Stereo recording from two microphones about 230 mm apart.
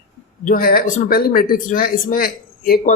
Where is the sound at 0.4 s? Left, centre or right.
Left.